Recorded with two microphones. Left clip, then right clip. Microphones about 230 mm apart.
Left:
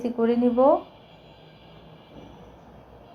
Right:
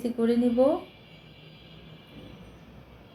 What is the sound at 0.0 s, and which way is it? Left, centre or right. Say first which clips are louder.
Speech: left 3 dB; centre.